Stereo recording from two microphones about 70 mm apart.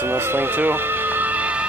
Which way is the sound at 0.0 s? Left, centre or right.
Right.